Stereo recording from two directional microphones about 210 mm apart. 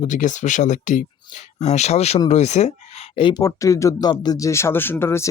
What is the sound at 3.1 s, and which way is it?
Speech, 20° left (ahead or behind).